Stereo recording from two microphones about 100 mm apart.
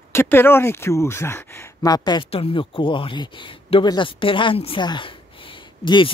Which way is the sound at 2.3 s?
65° left (ahead or behind).